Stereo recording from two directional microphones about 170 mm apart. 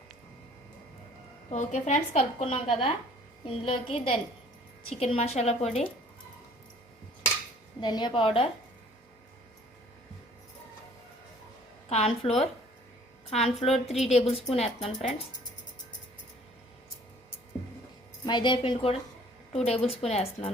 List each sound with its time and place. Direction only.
1.5 s a woman's voice: 45° left (ahead or behind)
7.8 s a woman's voice: 25° left (ahead or behind)
11.9 s a woman's voice: 35° left (ahead or behind)
13.3 s a woman's voice: 40° left (ahead or behind)
18.3 s a woman's voice: 25° left (ahead or behind)